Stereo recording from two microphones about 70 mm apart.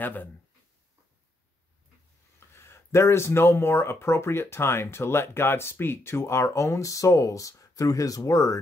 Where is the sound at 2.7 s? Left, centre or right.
Left.